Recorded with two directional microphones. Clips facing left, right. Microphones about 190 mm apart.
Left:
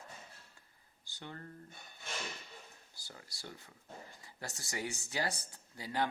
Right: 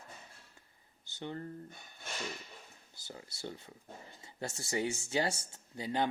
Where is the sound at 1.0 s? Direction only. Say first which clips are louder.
Right 7 dB; 25° right (ahead or behind).